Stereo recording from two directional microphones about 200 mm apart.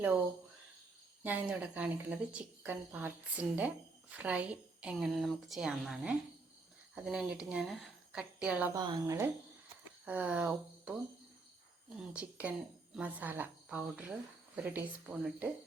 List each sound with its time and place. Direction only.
1.2 s a woman's voice: 10° right (ahead or behind)
8.7 s speech: 20° right (ahead or behind)
11.9 s speech: 5° right (ahead or behind)